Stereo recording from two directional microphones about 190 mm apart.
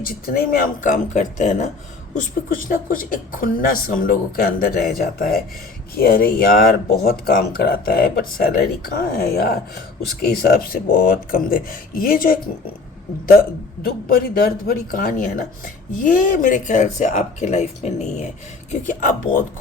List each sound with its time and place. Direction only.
0.0 s speech: 50° left (ahead or behind)
13.8 s speech: 50° left (ahead or behind)